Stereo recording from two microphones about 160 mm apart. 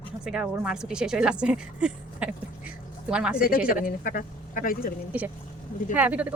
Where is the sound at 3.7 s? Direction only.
65° left (ahead or behind).